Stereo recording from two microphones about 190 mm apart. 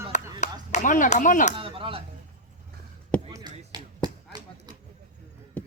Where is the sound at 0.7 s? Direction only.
40° left (ahead or behind).